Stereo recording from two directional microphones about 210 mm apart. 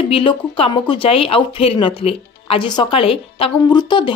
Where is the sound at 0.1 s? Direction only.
25° left (ahead or behind).